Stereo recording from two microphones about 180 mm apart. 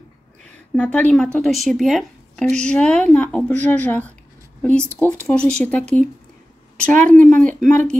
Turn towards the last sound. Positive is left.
turn(degrees=-45)  # may be behind; listen again after turning